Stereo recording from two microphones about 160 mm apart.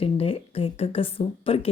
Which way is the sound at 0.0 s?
35° left (ahead or behind).